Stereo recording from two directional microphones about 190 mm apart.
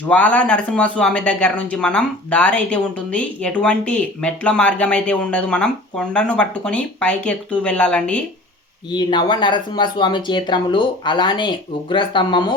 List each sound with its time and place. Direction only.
0.1 s a woman's voice: 10° left (ahead or behind)
8.9 s speech: 25° left (ahead or behind)